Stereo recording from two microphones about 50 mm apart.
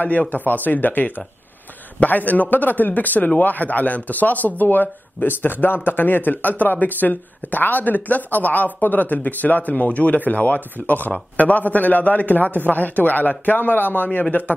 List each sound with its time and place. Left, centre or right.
0.3 s speech: left